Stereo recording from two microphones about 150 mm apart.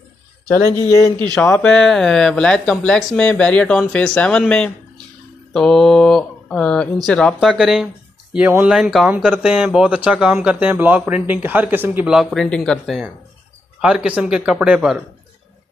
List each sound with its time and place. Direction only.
0.5 s speech: 20° left (ahead or behind)
1.3 s speech: 5° left (ahead or behind)